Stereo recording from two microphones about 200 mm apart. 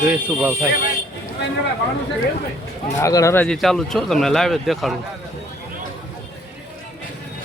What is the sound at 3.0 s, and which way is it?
A man's voice, 15° left (ahead or behind).